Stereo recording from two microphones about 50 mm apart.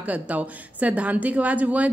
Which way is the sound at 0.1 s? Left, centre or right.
Right.